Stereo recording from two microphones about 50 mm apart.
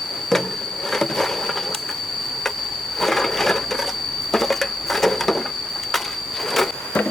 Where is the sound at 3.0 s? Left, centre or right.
Centre.